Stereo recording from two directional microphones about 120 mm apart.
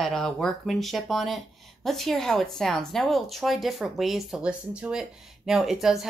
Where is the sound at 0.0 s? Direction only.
5° left (ahead or behind).